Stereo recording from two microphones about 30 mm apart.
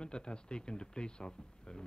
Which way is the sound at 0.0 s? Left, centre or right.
Left.